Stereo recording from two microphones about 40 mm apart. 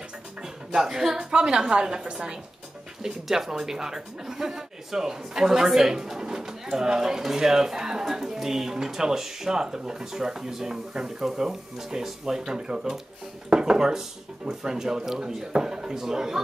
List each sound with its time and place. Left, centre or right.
0.4 s speech: centre